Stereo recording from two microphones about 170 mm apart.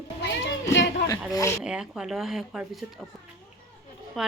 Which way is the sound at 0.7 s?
90° left.